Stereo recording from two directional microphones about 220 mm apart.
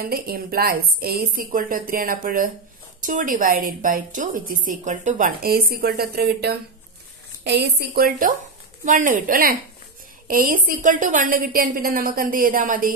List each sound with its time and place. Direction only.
0.0 s a woman's voice: 45° right (ahead or behind)